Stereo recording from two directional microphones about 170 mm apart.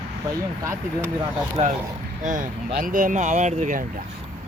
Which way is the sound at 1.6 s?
35° right (ahead or behind).